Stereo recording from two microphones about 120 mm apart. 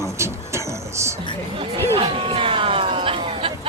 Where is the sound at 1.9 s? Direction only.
50° right (ahead or behind).